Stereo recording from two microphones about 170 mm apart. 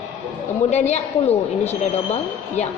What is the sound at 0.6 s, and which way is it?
A woman's voice, 40° left (ahead or behind).